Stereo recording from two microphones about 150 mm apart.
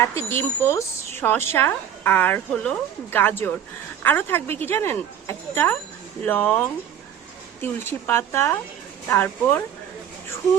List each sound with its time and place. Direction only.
0.3 s a woman's voice: 15° left (ahead or behind)